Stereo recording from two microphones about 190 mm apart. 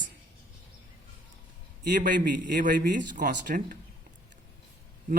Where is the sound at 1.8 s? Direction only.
50° right (ahead or behind).